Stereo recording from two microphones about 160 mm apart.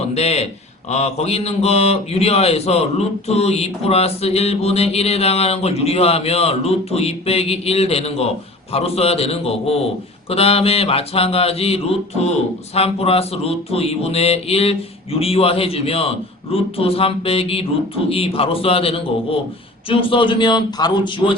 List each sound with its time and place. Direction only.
0.1 s mantra: 40° left (ahead or behind)
19.9 s speech: 35° left (ahead or behind)